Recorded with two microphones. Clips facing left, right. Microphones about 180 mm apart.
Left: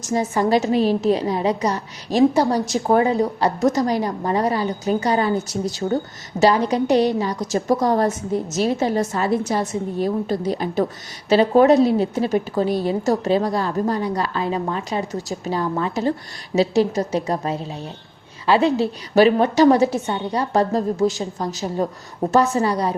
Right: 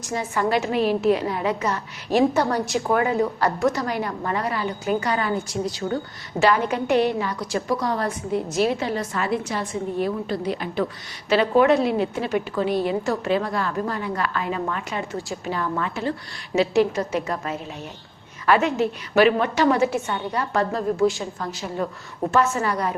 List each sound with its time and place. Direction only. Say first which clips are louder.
0.0 s a woman's voice: left 4 dB; 40° left (ahead or behind)
2.3 s a woman's voice: left 4 dB; 10° left (ahead or behind)
2.6 s a woman's voice: left 4 dB; 35° left (ahead or behind)